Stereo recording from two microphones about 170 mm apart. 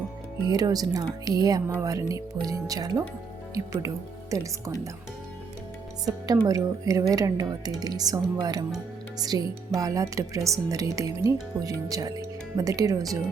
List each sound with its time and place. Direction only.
0.4 s speech: 20° right (ahead or behind)
6.1 s speech: 20° right (ahead or behind)